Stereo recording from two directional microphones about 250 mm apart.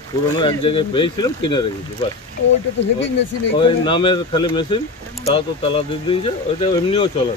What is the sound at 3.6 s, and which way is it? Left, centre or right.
Speech, centre.